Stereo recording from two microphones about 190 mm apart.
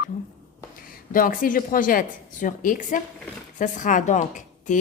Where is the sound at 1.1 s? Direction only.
45° left (ahead or behind).